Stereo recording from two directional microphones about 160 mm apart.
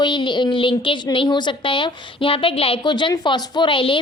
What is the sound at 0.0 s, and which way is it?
A woman's voice, 30° left (ahead or behind).